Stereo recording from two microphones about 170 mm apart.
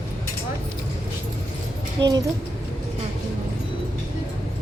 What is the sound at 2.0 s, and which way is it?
Speech, 25° right (ahead or behind).